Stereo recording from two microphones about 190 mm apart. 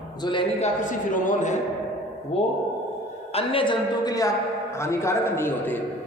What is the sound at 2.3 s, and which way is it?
A man's voice, 30° left (ahead or behind).